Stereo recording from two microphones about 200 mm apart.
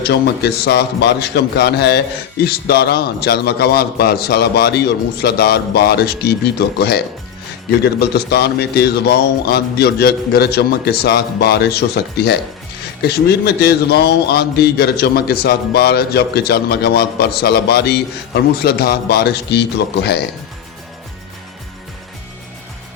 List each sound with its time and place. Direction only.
0.0 s speech: 55° left (ahead or behind)